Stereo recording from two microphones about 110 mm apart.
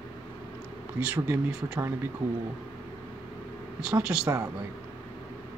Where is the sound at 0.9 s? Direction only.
15° right (ahead or behind).